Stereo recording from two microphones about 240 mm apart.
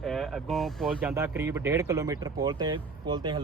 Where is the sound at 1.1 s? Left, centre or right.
Centre.